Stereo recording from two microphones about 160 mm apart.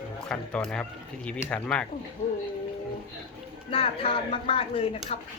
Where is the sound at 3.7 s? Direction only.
35° left (ahead or behind).